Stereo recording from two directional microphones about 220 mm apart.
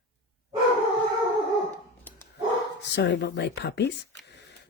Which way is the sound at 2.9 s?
50° left (ahead or behind).